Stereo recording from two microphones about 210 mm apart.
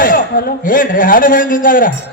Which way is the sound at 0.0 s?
40° left (ahead or behind).